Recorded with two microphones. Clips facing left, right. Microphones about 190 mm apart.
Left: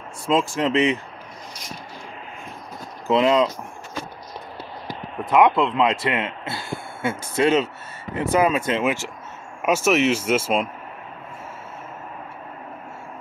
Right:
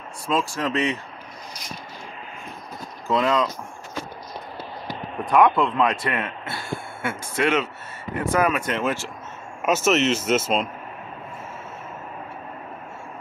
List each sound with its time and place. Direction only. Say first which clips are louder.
0.3 s speech: left 4 dB; 20° left (ahead or behind)
3.1 s speech: left 4 dB; 20° left (ahead or behind)
5.3 s speech: left 1 dB; 20° left (ahead or behind)
9.6 s speech: left 1 dB; 10° left (ahead or behind)